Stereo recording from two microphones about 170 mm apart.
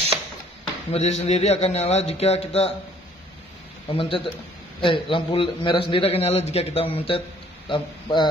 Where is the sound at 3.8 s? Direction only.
30° left (ahead or behind).